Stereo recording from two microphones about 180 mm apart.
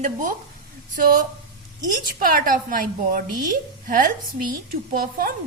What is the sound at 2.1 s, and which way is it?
A woman's voice, 50° right (ahead or behind).